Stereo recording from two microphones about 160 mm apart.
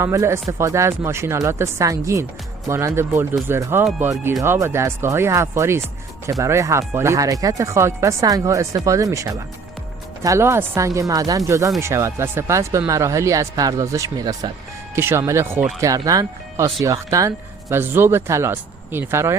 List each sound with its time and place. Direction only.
0.0 s speech: 15° right (ahead or behind)